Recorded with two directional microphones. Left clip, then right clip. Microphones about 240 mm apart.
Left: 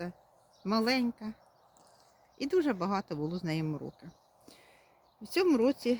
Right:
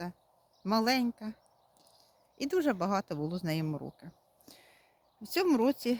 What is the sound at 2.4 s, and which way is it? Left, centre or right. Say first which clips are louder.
Speech: even; right.